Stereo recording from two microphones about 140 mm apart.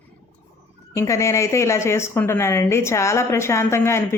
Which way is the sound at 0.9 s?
20° left (ahead or behind).